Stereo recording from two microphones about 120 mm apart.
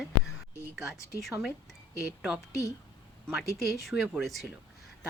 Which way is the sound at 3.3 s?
Centre (ahead or behind).